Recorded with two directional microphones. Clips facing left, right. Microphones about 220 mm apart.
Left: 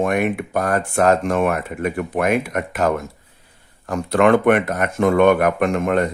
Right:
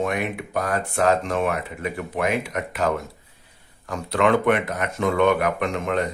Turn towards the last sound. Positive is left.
turn(degrees=50)  # may be behind; listen again after turning